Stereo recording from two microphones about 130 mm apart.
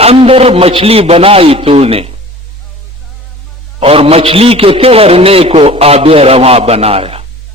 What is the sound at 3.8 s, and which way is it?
A man's voice, 45° right (ahead or behind).